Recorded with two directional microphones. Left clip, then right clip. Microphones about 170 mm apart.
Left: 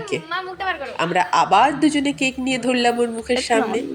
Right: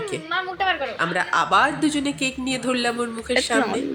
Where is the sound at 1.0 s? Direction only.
10° left (ahead or behind).